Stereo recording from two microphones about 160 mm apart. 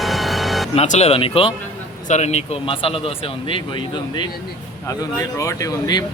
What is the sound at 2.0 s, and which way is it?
Speech, 45° left (ahead or behind).